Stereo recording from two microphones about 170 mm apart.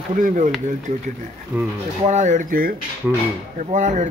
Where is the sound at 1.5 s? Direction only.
10° right (ahead or behind).